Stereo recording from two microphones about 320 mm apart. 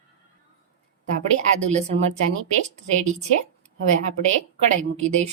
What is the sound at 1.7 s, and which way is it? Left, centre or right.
Speech, right.